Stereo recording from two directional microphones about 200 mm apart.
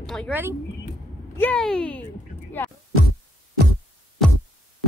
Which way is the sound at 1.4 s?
5° left (ahead or behind).